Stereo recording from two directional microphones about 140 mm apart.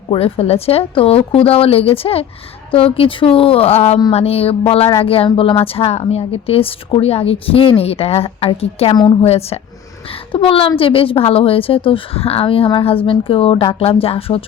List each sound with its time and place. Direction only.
0.1 s a woman's voice: 45° left (ahead or behind)
9.2 s a woman's voice: 50° left (ahead or behind)